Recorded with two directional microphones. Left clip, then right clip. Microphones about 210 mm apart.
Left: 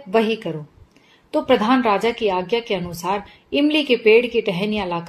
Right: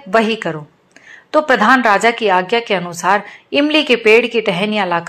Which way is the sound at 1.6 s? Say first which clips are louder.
Right 7 dB; 10° right (ahead or behind).